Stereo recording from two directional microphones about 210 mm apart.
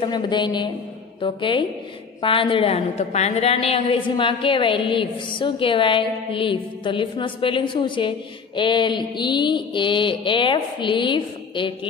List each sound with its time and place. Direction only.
0.0 s a woman's voice: 20° left (ahead or behind)